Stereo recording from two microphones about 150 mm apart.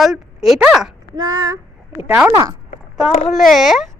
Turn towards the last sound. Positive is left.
turn(degrees=0)  # may be behind; listen again after turning